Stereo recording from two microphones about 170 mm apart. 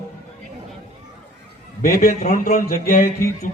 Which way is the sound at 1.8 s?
60° left (ahead or behind).